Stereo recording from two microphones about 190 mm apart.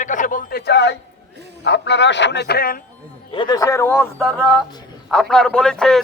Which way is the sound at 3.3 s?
20° left (ahead or behind).